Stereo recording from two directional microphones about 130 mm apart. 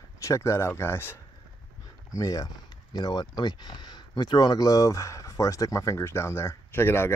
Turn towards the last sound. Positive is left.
turn(degrees=20)  # may be behind; listen again after turning